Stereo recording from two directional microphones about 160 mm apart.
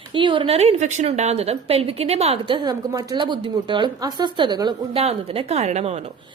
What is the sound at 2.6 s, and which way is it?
A woman's voice, 25° right (ahead or behind).